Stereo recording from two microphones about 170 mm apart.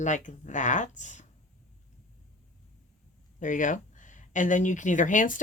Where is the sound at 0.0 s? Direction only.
45° left (ahead or behind).